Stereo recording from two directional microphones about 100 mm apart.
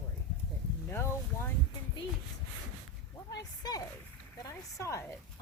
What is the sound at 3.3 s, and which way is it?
Speech, 40° left (ahead or behind).